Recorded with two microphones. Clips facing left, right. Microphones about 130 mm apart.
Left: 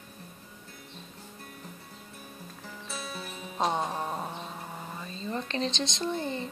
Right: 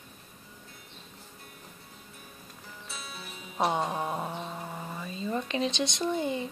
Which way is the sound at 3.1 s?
45° left (ahead or behind).